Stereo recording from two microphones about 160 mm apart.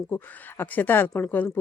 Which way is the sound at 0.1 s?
15° left (ahead or behind).